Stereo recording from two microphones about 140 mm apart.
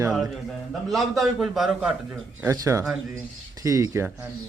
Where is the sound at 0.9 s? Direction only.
Centre (ahead or behind).